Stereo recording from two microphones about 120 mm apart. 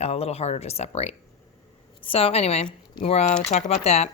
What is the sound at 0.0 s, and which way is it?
A woman's voice, 60° left (ahead or behind).